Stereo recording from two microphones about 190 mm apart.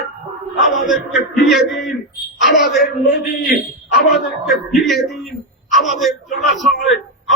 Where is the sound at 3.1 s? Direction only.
50° left (ahead or behind).